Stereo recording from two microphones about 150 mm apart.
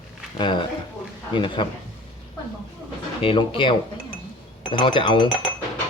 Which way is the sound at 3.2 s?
35° left (ahead or behind).